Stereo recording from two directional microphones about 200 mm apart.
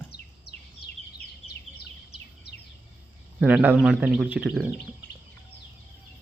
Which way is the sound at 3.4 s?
5° right (ahead or behind).